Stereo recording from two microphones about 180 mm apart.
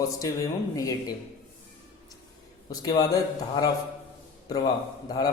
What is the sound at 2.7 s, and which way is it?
Speech, 20° left (ahead or behind).